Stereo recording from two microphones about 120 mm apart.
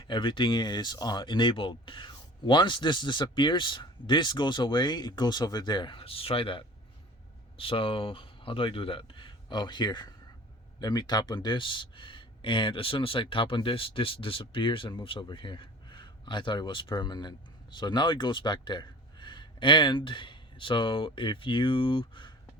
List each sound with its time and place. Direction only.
0.0 s speech: 45° left (ahead or behind)